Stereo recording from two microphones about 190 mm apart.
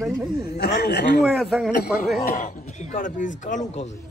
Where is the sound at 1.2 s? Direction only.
Centre (ahead or behind).